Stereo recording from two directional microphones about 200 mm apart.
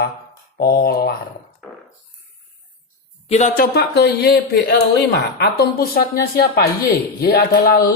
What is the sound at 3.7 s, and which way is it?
Speech, 55° left (ahead or behind).